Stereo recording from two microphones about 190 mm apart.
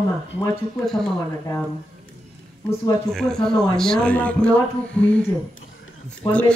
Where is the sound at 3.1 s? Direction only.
Centre (ahead or behind).